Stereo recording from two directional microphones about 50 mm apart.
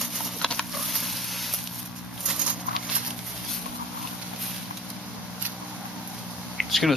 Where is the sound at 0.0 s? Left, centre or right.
Centre.